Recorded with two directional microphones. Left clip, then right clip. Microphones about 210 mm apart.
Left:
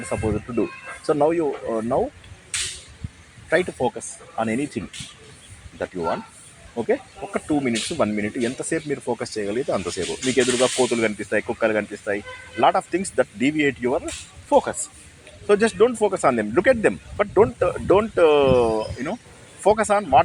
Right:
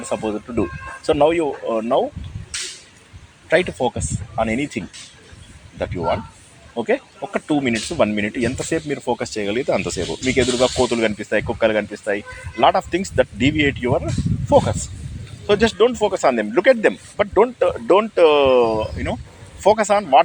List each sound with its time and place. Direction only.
0.1 s speech: 25° right (ahead or behind)
3.5 s speech: 20° right (ahead or behind)
6.7 s speech: 25° right (ahead or behind)